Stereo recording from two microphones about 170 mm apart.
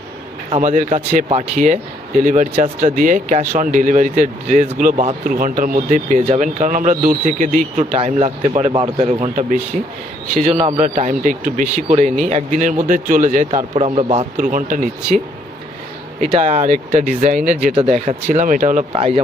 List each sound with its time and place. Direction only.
0.5 s speech: 45° right (ahead or behind)
8.7 s speech: 30° right (ahead or behind)
9.3 s speech: 50° right (ahead or behind)
10.8 s speech: 50° right (ahead or behind)
13.7 s speech: 35° right (ahead or behind)
16.2 s speech: 40° right (ahead or behind)